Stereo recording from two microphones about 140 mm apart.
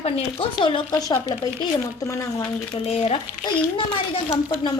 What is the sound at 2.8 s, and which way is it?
Speech, 45° left (ahead or behind).